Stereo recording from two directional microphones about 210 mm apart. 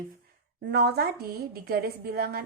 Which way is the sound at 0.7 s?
50° right (ahead or behind).